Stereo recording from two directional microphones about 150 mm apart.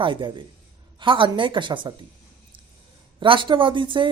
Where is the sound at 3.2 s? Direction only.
35° right (ahead or behind).